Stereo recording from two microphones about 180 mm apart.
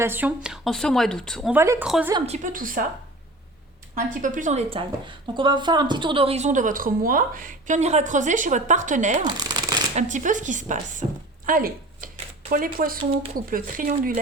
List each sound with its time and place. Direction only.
0.0 s speech: 10° right (ahead or behind)
1.5 s a woman's voice: 15° right (ahead or behind)
2.2 s a woman's voice: 40° right (ahead or behind)
4.1 s a woman's voice: 45° right (ahead or behind)